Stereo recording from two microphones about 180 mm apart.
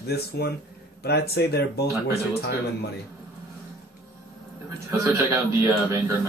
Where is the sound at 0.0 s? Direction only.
60° left (ahead or behind).